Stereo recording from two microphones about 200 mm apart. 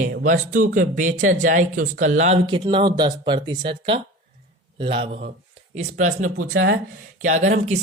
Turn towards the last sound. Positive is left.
turn(degrees=-35)  # may be behind; listen again after turning